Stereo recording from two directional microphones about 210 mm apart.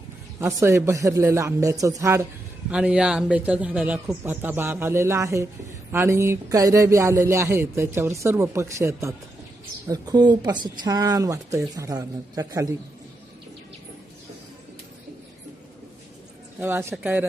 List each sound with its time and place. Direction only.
0.3 s speech: 10° right (ahead or behind)
16.6 s speech: 10° right (ahead or behind)